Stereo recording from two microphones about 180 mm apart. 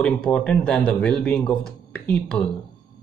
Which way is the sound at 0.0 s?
5° left (ahead or behind).